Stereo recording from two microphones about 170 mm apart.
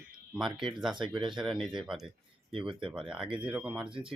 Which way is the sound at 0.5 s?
30° right (ahead or behind).